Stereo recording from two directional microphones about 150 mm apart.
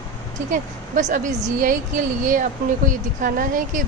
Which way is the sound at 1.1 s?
60° right (ahead or behind).